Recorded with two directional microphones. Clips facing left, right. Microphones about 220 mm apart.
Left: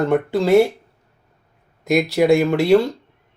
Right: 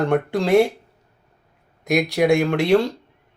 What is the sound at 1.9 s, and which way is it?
Speech, centre (ahead or behind).